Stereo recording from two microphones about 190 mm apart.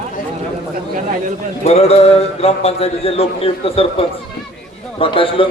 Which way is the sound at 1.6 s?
35° left (ahead or behind).